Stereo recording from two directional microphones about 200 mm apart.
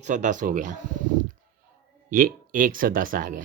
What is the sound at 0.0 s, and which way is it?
Speech, 40° right (ahead or behind).